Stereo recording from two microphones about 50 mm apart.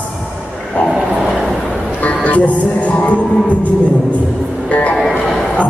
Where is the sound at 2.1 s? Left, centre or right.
Left.